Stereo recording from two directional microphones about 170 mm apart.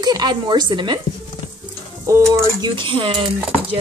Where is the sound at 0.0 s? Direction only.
25° right (ahead or behind).